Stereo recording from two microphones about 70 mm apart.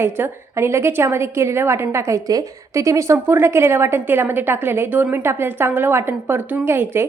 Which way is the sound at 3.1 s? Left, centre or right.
Right.